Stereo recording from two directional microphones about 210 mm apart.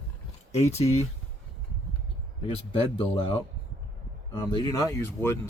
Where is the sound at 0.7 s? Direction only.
30° left (ahead or behind).